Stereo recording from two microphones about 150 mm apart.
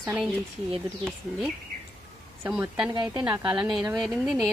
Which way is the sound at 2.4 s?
10° right (ahead or behind).